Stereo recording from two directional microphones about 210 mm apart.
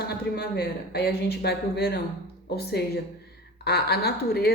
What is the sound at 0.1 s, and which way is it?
Speech, 50° left (ahead or behind).